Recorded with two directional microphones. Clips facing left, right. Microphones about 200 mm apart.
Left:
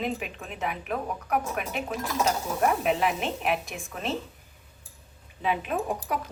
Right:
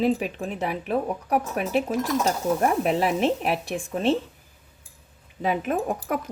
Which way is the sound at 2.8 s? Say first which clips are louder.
Right 4 dB; 35° right (ahead or behind).